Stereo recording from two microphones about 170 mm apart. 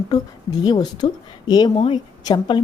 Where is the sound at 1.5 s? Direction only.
25° left (ahead or behind).